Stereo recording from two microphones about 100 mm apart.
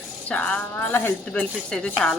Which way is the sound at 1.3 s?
10° left (ahead or behind).